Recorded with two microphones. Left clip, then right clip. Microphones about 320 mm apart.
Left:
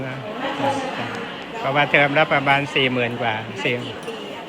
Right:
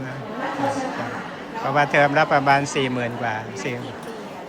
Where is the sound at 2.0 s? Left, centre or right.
Centre.